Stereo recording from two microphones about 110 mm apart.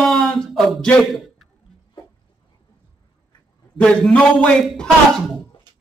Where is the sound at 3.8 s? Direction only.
5° left (ahead or behind).